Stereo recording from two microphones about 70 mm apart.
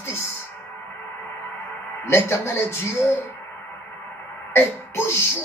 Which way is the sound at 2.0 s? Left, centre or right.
Left.